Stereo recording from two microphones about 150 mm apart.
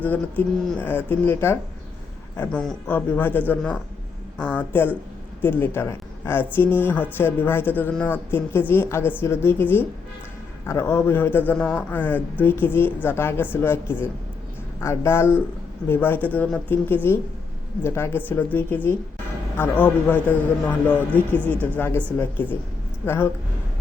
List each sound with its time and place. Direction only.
0.0 s speech: 10° left (ahead or behind)